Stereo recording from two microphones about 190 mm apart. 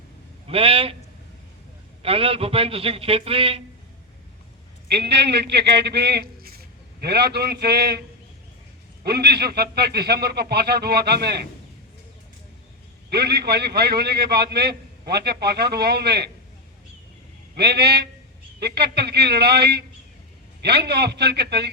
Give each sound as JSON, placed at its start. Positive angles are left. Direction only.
{"t": 0.4, "sound": "a man's voice", "side_deg": -30}
{"t": 2.0, "sound": "a man's voice", "side_deg": -30}
{"t": 4.9, "sound": "a man's voice", "side_deg": -60}
{"t": 9.0, "sound": "a man's voice", "side_deg": -55}
{"t": 13.1, "sound": "a man's voice", "side_deg": -60}
{"t": 17.6, "sound": "a man's voice", "side_deg": -55}